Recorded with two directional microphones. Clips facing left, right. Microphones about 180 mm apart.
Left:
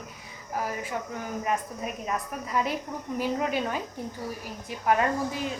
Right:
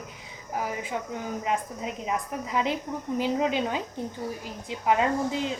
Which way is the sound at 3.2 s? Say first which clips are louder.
Right 2 dB; 20° right (ahead or behind).